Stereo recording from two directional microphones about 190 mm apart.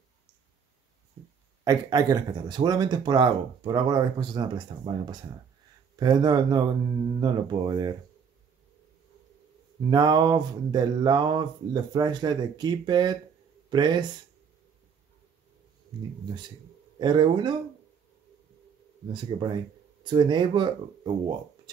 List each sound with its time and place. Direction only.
1.6 s speech: 20° right (ahead or behind)
9.8 s speech: 20° right (ahead or behind)
15.9 s speech: 25° right (ahead or behind)
19.1 s speech: 25° right (ahead or behind)